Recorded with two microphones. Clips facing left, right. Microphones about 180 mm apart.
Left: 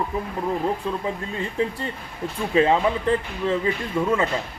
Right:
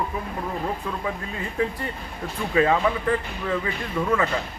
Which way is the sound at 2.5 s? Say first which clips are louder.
Left 1 dB; 25° left (ahead or behind).